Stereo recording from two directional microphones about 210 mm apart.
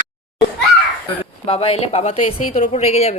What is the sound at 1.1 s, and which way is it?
Speech, 25° left (ahead or behind).